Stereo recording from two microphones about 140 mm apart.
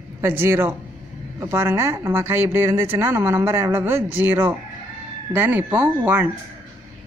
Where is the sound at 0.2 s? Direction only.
15° right (ahead or behind).